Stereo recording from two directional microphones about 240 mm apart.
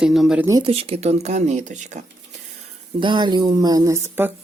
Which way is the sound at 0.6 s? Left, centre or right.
Right.